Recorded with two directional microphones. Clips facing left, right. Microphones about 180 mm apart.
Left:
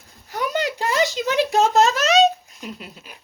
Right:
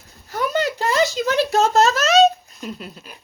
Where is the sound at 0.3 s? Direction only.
15° left (ahead or behind).